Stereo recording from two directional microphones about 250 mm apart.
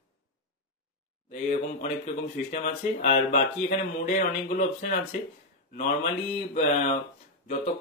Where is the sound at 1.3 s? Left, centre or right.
Left.